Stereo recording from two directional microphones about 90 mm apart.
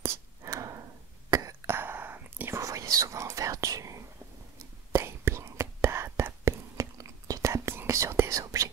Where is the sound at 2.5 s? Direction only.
40° right (ahead or behind).